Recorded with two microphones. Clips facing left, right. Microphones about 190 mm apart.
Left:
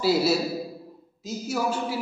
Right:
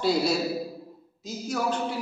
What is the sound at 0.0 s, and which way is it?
A man's voice, 5° left (ahead or behind).